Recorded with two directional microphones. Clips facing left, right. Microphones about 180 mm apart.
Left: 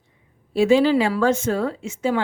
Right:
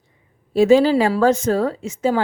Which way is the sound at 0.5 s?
40° right (ahead or behind).